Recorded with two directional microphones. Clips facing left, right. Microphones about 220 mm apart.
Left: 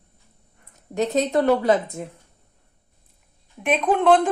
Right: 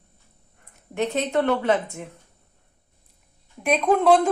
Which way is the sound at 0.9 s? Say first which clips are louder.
Left 3 dB; 40° left (ahead or behind).